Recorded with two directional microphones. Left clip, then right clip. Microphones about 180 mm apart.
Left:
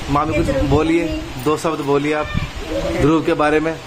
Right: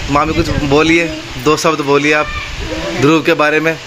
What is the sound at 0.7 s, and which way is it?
A man's voice, 15° right (ahead or behind).